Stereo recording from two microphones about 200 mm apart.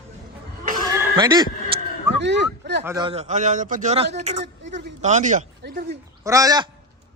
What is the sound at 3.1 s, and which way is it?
Speech, 35° right (ahead or behind).